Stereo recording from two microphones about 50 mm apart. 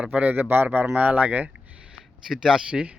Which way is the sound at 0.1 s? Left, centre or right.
Right.